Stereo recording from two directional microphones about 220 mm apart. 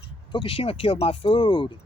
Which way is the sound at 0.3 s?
25° left (ahead or behind).